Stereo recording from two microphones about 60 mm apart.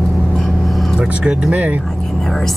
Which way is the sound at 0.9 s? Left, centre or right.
Right.